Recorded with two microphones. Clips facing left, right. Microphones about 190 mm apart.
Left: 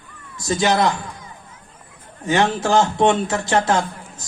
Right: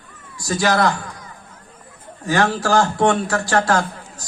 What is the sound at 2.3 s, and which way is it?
Speech, 20° left (ahead or behind).